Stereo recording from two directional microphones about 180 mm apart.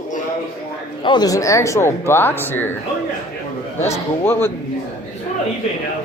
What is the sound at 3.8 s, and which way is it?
Speech, 15° left (ahead or behind).